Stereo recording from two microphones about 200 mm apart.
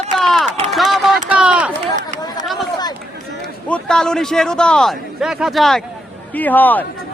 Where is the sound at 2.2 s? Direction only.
20° left (ahead or behind).